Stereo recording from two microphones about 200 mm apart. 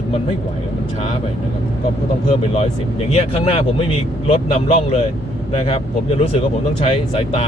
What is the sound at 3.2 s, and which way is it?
A man's voice, 30° left (ahead or behind).